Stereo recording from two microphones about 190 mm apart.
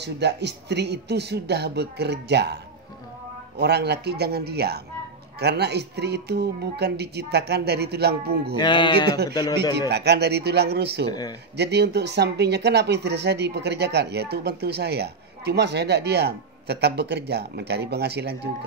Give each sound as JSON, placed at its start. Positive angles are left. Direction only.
{"t": 0.0, "sound": "speech", "side_deg": -60}
{"t": 8.5, "sound": "speech", "side_deg": 25}
{"t": 9.8, "sound": "speech", "side_deg": -60}
{"t": 11.1, "sound": "speech", "side_deg": 20}
{"t": 11.5, "sound": "speech", "side_deg": -60}